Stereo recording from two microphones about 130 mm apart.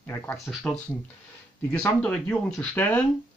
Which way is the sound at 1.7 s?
10° left (ahead or behind).